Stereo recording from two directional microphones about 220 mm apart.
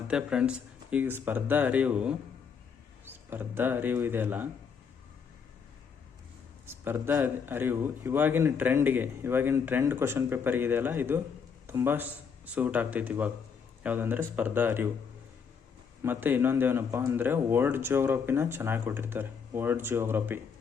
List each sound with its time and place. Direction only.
0.1 s a man's voice: 5° right (ahead or behind)
6.7 s a man's voice: 10° right (ahead or behind)
16.0 s a man's voice: 10° right (ahead or behind)